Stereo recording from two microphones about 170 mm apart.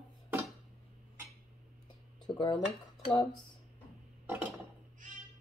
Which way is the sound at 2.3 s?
25° left (ahead or behind).